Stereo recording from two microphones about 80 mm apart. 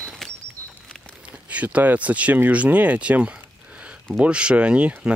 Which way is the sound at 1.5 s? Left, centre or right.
Centre.